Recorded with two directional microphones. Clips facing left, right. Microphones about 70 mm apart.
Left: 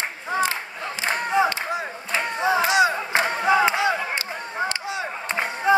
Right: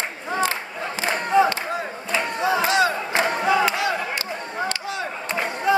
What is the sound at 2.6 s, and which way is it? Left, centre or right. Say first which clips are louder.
Battle cry: left 1 dB; centre.